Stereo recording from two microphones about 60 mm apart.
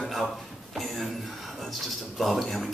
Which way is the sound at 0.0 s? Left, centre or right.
Centre.